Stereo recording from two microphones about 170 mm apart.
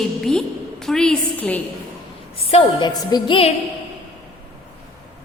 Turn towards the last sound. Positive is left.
turn(degrees=30)  # may be behind; listen again after turning